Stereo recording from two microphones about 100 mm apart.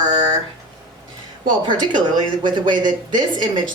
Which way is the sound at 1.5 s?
50° right (ahead or behind).